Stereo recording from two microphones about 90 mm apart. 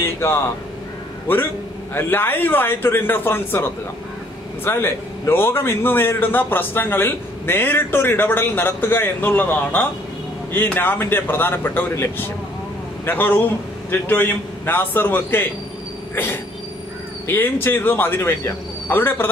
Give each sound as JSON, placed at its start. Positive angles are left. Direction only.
{"t": 0.0, "sound": "a man's voice", "side_deg": 30}
{"t": 17.3, "sound": "a man's voice", "side_deg": 25}